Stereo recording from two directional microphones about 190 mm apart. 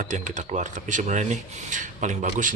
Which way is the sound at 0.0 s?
40° right (ahead or behind).